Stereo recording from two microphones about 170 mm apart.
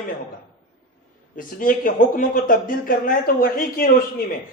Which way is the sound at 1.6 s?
55° left (ahead or behind).